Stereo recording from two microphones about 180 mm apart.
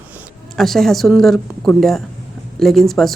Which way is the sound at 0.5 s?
Centre (ahead or behind).